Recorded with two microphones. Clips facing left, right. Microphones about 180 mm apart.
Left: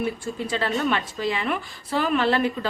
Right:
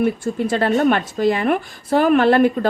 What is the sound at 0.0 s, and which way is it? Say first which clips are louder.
A woman's voice: right 8 dB; 50° right (ahead or behind).